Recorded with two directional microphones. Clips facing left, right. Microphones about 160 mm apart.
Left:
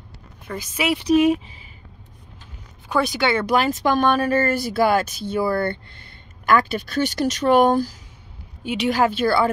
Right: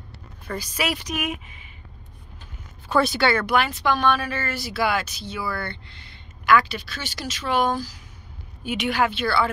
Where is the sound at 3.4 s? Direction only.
40° left (ahead or behind).